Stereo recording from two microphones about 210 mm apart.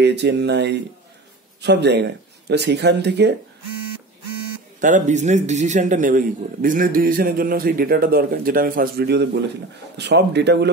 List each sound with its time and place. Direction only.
0.0 s a man's voice: 55° right (ahead or behind)
4.7 s a man's voice: 40° right (ahead or behind); by 10.7 s 55° right (ahead or behind)